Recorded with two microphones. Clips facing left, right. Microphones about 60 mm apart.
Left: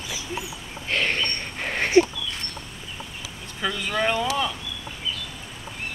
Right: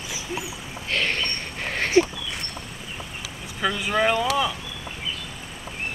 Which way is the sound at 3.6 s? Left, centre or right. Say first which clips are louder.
Right 3 dB; centre.